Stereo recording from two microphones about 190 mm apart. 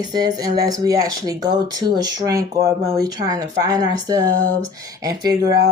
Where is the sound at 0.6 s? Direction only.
20° right (ahead or behind).